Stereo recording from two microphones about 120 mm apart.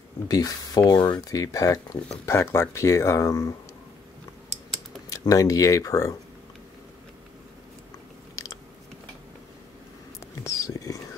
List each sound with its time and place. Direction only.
0.3 s speech: 35° left (ahead or behind)
5.1 s speech: 30° left (ahead or behind)
10.2 s whispering: 25° left (ahead or behind)